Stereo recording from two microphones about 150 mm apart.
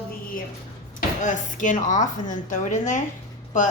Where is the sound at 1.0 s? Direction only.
55° left (ahead or behind).